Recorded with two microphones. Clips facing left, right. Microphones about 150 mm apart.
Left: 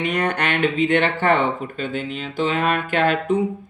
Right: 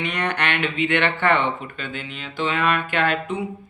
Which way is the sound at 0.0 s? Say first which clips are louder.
Left 3 dB; 45° left (ahead or behind).